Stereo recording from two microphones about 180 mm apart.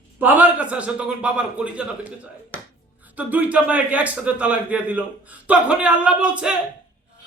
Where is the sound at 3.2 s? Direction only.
10° right (ahead or behind).